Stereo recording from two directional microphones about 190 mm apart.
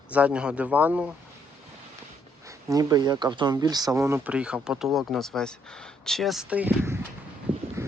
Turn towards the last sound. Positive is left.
turn(degrees=-30)  # may be behind; listen again after turning